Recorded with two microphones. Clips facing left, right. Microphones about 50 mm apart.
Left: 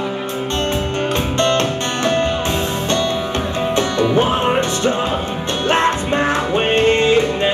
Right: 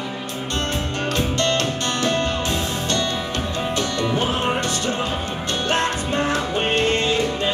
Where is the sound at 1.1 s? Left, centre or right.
Left.